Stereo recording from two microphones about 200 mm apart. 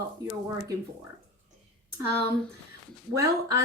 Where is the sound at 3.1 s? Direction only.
15° right (ahead or behind).